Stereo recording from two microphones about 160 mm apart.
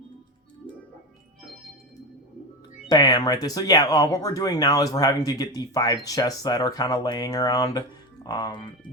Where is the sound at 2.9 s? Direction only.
25° left (ahead or behind).